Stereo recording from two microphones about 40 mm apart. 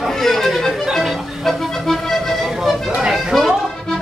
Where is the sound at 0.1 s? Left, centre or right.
Centre.